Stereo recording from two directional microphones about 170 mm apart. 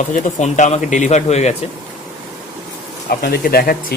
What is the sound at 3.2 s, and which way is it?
Speech, 60° left (ahead or behind).